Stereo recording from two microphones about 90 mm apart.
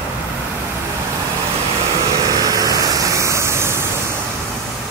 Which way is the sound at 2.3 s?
40° right (ahead or behind).